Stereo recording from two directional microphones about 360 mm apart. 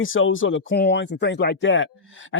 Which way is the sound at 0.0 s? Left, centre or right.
Left.